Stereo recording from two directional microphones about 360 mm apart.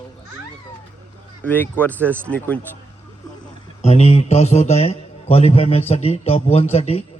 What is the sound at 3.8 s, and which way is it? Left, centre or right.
A man's voice, centre.